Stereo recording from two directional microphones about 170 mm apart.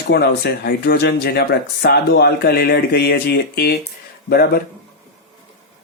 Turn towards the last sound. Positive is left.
turn(degrees=65)  # may be behind; listen again after turning